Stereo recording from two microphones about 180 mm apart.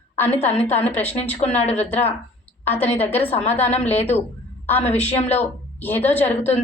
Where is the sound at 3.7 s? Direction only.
35° left (ahead or behind).